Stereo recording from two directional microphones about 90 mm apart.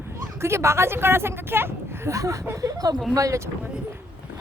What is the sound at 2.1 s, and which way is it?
Speech, 35° right (ahead or behind).